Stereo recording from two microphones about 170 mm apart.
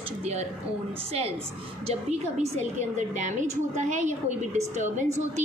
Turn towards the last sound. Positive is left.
turn(degrees=-40)  # may be behind; listen again after turning